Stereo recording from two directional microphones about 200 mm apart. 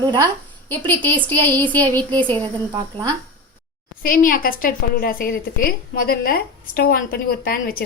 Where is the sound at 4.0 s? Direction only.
45° left (ahead or behind).